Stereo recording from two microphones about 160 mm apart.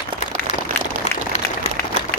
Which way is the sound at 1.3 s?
45° left (ahead or behind).